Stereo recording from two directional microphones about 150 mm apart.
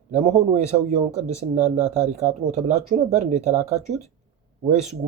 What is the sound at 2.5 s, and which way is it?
Speech, 50° right (ahead or behind).